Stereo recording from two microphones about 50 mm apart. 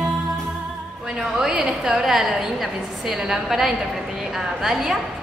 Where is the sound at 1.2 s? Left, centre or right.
Centre.